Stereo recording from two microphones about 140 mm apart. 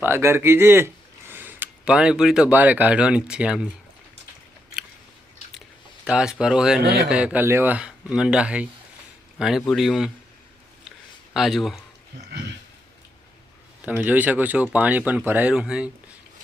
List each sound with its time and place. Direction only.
0.0 s speech: 15° right (ahead or behind)
6.1 s speech: 5° right (ahead or behind)
11.3 s speech: centre (ahead or behind)
13.8 s speech: 10° right (ahead or behind)